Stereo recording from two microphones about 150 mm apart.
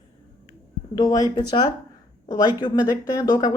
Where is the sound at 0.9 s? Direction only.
25° left (ahead or behind).